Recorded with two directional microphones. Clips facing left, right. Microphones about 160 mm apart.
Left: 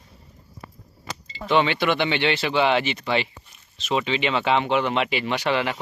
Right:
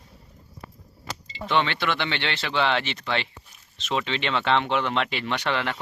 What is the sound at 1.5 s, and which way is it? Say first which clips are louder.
Speech: left 4 dB; 10° left (ahead or behind).